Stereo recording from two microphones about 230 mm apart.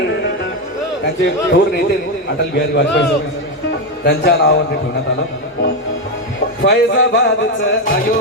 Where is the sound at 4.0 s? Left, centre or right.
Left.